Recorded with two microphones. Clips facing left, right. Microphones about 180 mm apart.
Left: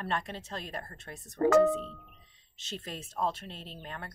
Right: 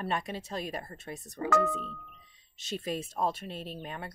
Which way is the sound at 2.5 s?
10° right (ahead or behind).